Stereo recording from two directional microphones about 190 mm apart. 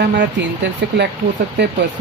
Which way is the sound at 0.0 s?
65° right (ahead or behind).